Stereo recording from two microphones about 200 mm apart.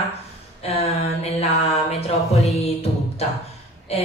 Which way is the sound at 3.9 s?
30° left (ahead or behind).